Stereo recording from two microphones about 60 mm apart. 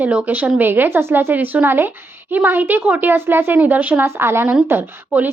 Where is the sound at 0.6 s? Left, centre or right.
Right.